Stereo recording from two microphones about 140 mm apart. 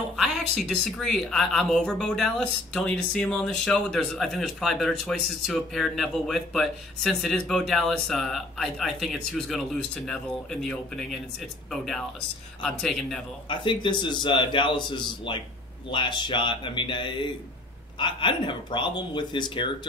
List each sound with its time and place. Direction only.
0.1 s speech: centre (ahead or behind)
13.5 s speech: 35° left (ahead or behind)